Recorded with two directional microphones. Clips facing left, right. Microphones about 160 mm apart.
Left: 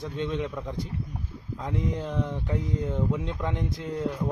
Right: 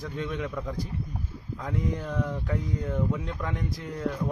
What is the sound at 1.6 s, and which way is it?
Speech, 20° left (ahead or behind).